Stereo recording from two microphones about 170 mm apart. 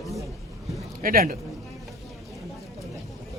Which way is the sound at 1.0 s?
55° right (ahead or behind).